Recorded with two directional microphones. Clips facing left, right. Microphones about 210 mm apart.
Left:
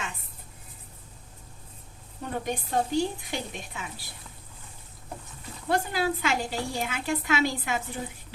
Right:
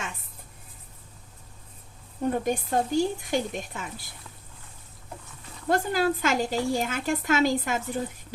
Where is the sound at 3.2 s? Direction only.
45° right (ahead or behind).